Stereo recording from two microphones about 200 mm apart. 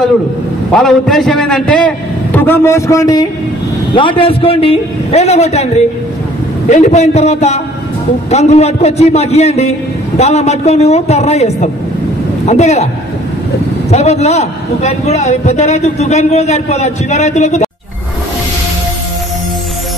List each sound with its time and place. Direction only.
0.7 s a man's voice: centre (ahead or behind); by 5.7 s 35° left (ahead or behind)
6.7 s a man's voice: 35° left (ahead or behind)
13.8 s a man's voice: 35° left (ahead or behind)